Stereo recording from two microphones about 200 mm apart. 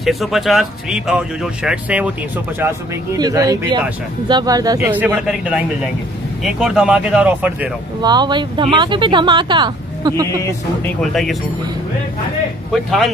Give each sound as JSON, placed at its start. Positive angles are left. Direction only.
{"t": 0.0, "sound": "speech", "side_deg": 0}
{"t": 4.7, "sound": "speech", "side_deg": -10}
{"t": 8.0, "sound": "speech", "side_deg": -20}
{"t": 11.0, "sound": "speech", "side_deg": 0}